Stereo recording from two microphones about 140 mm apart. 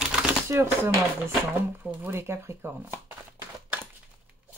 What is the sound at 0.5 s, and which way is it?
Speech, 20° right (ahead or behind).